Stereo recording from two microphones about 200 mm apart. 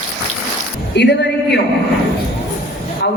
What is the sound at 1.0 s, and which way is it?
Speech, 60° left (ahead or behind).